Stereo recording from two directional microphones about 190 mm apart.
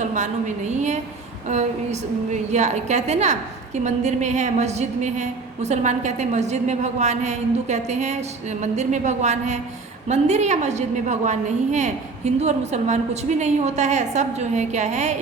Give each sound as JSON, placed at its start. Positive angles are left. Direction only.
{"t": 0.0, "sound": "a woman's voice", "side_deg": -40}